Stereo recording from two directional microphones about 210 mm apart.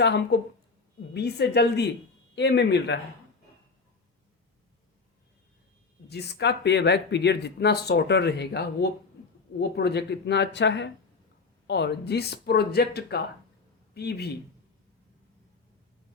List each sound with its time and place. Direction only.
0.0 s speech: 55° left (ahead or behind)
6.1 s a man's voice: 50° left (ahead or behind)